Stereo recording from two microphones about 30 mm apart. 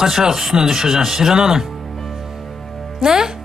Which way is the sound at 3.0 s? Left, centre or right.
Centre.